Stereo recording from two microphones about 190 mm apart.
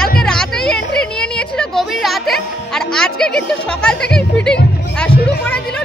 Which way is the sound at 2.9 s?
5° left (ahead or behind).